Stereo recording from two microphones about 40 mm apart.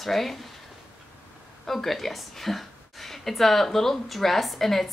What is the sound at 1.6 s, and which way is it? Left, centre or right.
A woman's voice, centre.